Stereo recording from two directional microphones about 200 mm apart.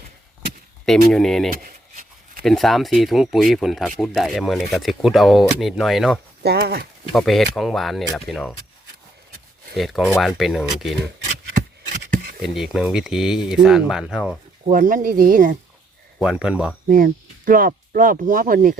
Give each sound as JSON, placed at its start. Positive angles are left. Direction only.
{"t": 0.9, "sound": "speech", "side_deg": 0}
{"t": 1.6, "sound": "a sound", "side_deg": -45}
{"t": 2.4, "sound": "speech", "side_deg": 0}
{"t": 6.4, "sound": "speech", "side_deg": -55}
{"t": 7.1, "sound": "speech", "side_deg": 0}
{"t": 9.7, "sound": "speech", "side_deg": 0}
{"t": 12.4, "sound": "speech", "side_deg": 0}
{"t": 14.7, "sound": "speech", "side_deg": -40}
{"t": 16.1, "sound": "speech", "side_deg": 0}
{"t": 16.9, "sound": "speech", "side_deg": -45}